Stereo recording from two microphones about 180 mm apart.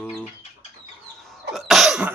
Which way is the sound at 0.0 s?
5° left (ahead or behind).